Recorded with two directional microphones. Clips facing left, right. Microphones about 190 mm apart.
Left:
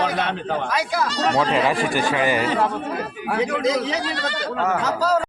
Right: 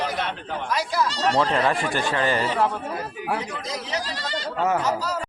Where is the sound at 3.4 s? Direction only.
90° left; by 4.4 s 65° left (ahead or behind).